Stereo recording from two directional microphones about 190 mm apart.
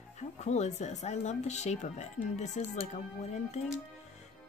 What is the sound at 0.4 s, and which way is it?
Speech, 35° left (ahead or behind).